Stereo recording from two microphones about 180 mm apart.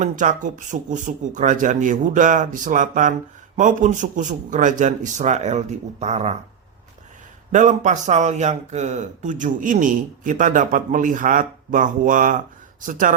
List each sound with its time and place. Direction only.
0.0 s speech: 45° right (ahead or behind)
7.5 s speech: 45° right (ahead or behind)